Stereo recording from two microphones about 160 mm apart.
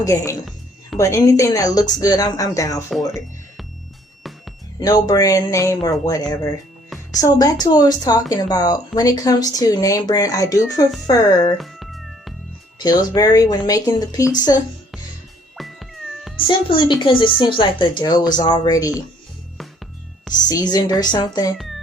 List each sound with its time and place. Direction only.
0.0 s speech: 20° left (ahead or behind)
4.2 s music: centre (ahead or behind)
4.8 s speech: 25° left (ahead or behind)
11.5 s music: centre (ahead or behind)
12.8 s speech: 25° left (ahead or behind)
15.5 s cat: centre (ahead or behind)
16.6 s speech: 30° left (ahead or behind)
19.5 s music: centre (ahead or behind)
20.7 s speech: 25° left (ahead or behind)